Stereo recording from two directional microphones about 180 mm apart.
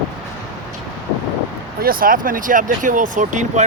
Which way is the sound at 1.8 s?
55° right (ahead or behind).